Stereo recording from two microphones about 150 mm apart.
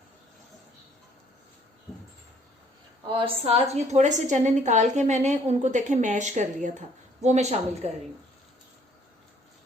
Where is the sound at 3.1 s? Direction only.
35° right (ahead or behind).